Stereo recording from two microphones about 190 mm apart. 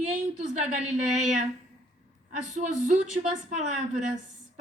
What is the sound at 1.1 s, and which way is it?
A woman's voice, 40° right (ahead or behind).